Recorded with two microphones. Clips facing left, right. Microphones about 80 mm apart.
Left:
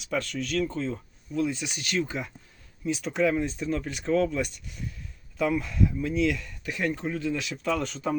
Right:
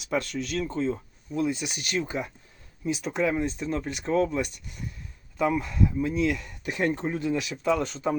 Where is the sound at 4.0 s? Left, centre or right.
Right.